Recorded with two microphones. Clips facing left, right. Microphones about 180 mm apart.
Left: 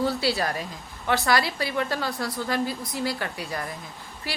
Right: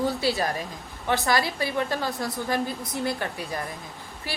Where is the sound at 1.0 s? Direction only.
20° right (ahead or behind).